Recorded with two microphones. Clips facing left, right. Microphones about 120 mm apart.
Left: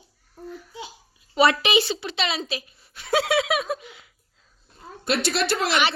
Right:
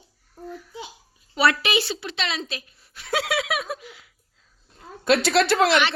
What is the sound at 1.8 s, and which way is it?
A woman's voice, centre (ahead or behind).